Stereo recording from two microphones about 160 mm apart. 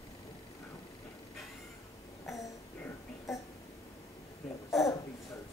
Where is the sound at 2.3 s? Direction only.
20° left (ahead or behind).